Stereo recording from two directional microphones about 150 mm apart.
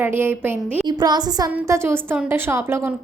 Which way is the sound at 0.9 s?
25° right (ahead or behind).